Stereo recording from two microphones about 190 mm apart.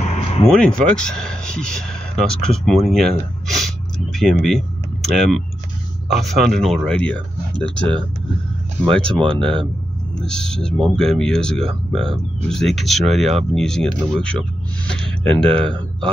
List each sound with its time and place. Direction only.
0.0 s vehicle: 35° left (ahead or behind)
0.6 s speech: 5° left (ahead or behind)